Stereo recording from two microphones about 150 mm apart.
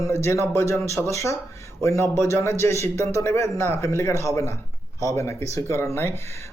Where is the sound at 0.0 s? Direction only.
20° left (ahead or behind).